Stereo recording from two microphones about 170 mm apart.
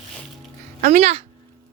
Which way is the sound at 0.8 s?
45° right (ahead or behind).